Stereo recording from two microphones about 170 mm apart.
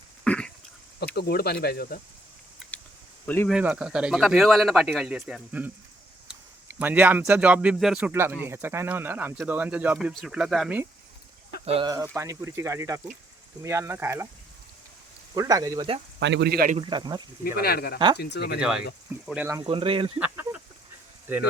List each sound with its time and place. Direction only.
0.3 s throat clearing: 5° left (ahead or behind)
1.1 s speech: 65° left (ahead or behind)
2.7 s a sound: 10° left (ahead or behind)
3.2 s speech: 10° left (ahead or behind)
3.5 s speech: 5° right (ahead or behind)
11.6 s speech: 35° right (ahead or behind)
12.1 s speech: 15° right (ahead or behind)
15.4 s speech: 20° right (ahead or behind)
16.2 s speech: 80° right
16.7 s speech: 25° right (ahead or behind)
17.4 s speech: 65° left (ahead or behind)
19.2 s speech: 5° right (ahead or behind)
19.6 s speech: 30° right (ahead or behind)
20.1 s a sound: 10° right (ahead or behind)